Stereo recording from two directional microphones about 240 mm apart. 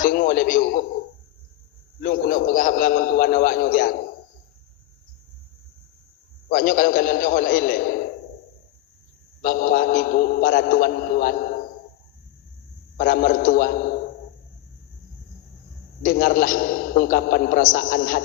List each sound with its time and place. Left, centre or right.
0.0 s a man's voice: left
2.0 s a man's voice: left
6.5 s a man's voice: left
9.4 s a man's voice: left
13.0 s a man's voice: left
16.0 s a man's voice: left